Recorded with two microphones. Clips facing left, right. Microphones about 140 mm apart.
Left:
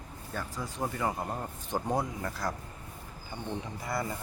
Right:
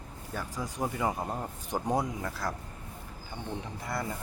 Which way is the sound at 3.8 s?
Centre (ahead or behind).